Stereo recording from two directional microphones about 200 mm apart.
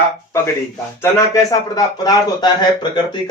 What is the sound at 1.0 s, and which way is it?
Speech, 20° left (ahead or behind).